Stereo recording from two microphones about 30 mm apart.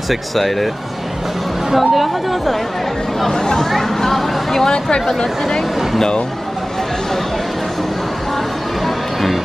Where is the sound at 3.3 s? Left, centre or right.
Left.